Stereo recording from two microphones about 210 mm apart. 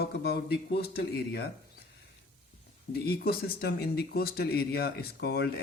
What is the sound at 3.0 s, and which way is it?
Speech, 45° left (ahead or behind).